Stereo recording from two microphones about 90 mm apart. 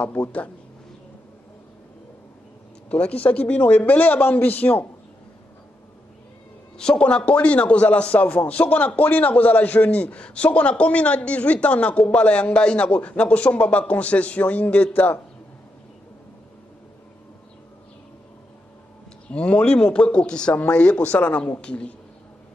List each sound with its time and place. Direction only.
0.0 s a man's voice: 15° left (ahead or behind)
2.9 s a man's voice: 15° left (ahead or behind)
6.8 s a man's voice: 10° left (ahead or behind)
19.3 s a man's voice: 10° left (ahead or behind)